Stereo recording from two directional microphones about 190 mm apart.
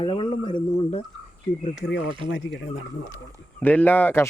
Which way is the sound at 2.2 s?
70° left (ahead or behind).